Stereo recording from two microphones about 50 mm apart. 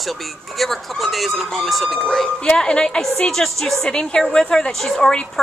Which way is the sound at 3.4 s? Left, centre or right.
Centre.